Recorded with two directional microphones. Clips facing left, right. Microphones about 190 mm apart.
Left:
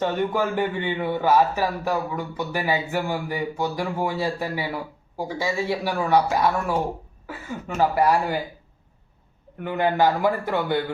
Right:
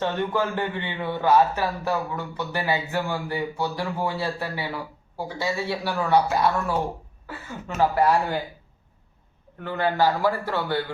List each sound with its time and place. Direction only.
0.0 s a man's voice: 10° left (ahead or behind)
7.8 s a man's voice: 10° left (ahead or behind)
9.6 s a man's voice: 15° left (ahead or behind)